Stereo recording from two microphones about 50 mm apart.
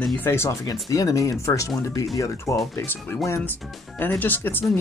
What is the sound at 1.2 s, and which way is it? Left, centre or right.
Speech, left.